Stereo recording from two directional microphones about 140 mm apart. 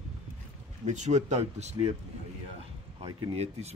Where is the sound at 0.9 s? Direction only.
55° right (ahead or behind).